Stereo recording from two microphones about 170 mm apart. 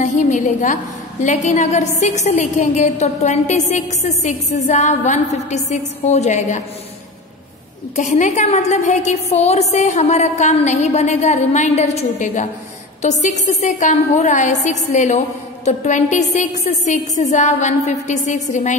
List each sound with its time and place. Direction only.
0.0 s a sound: 45° left (ahead or behind)
1.2 s a woman's voice: 45° left (ahead or behind)
7.9 s a woman's voice: 45° left (ahead or behind)